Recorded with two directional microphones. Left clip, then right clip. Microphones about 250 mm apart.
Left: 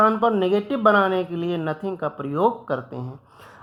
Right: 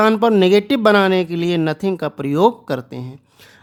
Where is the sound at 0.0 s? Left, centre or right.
Right.